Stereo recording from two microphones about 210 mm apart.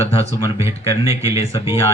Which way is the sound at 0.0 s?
30° left (ahead or behind).